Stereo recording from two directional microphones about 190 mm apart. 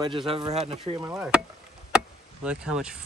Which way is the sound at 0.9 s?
15° right (ahead or behind).